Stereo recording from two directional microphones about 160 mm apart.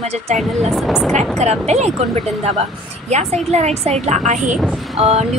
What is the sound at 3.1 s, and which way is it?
A woman's voice, 45° right (ahead or behind).